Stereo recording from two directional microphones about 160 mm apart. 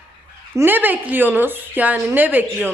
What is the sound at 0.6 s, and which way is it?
Speech, 10° right (ahead or behind).